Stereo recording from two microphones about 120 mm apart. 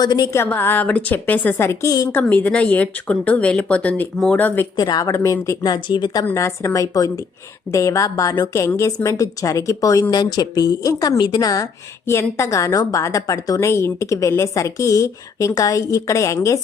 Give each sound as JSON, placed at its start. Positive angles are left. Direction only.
{"t": 0.0, "sound": "speech", "side_deg": 35}
{"t": 0.3, "sound": "a woman's voice", "side_deg": 20}
{"t": 2.1, "sound": "a woman's voice", "side_deg": 15}
{"t": 4.8, "sound": "speech", "side_deg": 35}
{"t": 6.2, "sound": "a woman's voice", "side_deg": 25}